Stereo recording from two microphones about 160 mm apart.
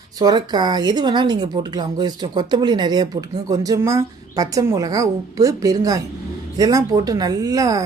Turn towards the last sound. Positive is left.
turn(degrees=-20)  # may be behind; listen again after turning